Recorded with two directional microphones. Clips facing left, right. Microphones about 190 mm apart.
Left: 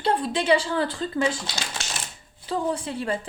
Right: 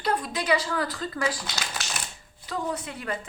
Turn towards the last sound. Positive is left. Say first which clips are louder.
# left 5 dB
turn(degrees=30)  # may be behind; listen again after turning